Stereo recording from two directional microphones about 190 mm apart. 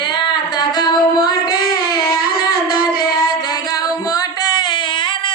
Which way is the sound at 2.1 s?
50° left (ahead or behind).